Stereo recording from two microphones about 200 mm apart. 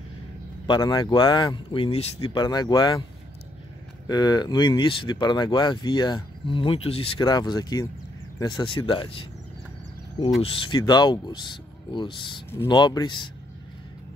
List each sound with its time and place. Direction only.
0.7 s speech: 20° left (ahead or behind)
4.1 s speech: 20° left (ahead or behind)
10.4 s speech: 25° left (ahead or behind)